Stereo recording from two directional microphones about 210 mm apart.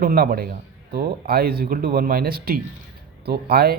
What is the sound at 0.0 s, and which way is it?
Speech, 45° right (ahead or behind).